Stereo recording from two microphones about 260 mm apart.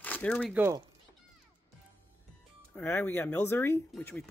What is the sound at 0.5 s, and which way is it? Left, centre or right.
Speech, centre.